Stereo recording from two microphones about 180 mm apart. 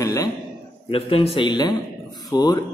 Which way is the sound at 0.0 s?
20° left (ahead or behind).